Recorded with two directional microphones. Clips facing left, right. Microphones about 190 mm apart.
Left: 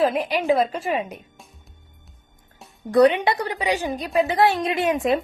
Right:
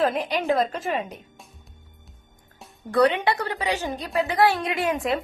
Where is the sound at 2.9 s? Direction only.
15° left (ahead or behind).